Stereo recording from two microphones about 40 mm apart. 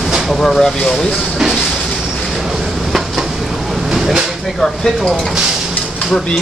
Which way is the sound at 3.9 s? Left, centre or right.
Centre.